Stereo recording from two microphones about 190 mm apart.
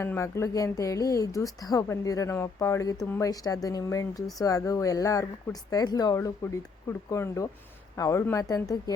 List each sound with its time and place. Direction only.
0.0 s speech: 15° left (ahead or behind)